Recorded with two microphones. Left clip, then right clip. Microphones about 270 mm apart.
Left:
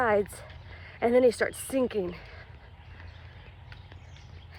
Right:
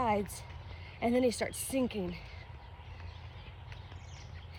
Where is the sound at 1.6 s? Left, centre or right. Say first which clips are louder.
Left 6 dB; left.